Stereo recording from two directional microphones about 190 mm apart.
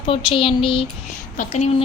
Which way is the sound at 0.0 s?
25° left (ahead or behind).